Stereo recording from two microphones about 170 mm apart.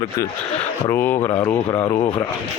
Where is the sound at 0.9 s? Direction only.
10° left (ahead or behind).